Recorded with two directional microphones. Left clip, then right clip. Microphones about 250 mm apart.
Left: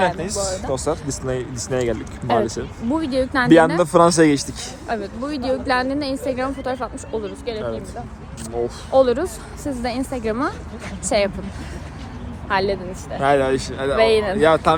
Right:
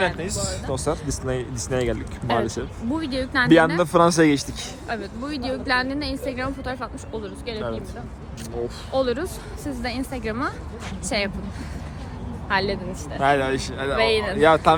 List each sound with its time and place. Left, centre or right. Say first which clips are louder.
0.2 s speech: left 5 dB; centre
2.2 s a woman's voice: left 4 dB; centre
3.8 s speech: left 3 dB; centre
4.9 s a woman's voice: left 5 dB; centre
8.9 s a woman's voice: left 8 dB; centre
12.5 s speech: left 3 dB; centre
13.9 s speech: left 5 dB; centre
14.3 s speech: right 3 dB; centre